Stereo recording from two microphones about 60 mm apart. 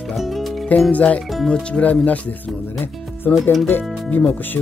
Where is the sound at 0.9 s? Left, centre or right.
Left.